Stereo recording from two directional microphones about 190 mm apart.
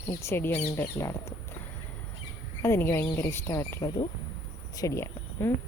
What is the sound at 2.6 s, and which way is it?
Speech, 15° left (ahead or behind).